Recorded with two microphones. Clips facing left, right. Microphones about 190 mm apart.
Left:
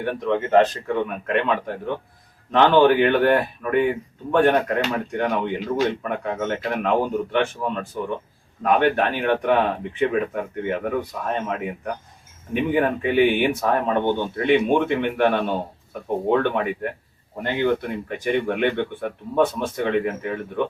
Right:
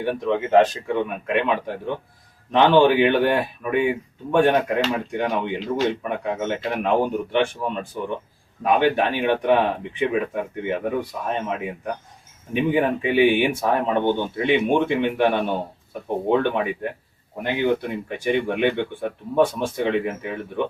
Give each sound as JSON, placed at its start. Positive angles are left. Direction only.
{"t": 0.0, "sound": "speech", "side_deg": -10}
{"t": 5.5, "sound": "speech", "side_deg": 0}
{"t": 6.0, "sound": "speech", "side_deg": -15}
{"t": 12.5, "sound": "speech", "side_deg": -15}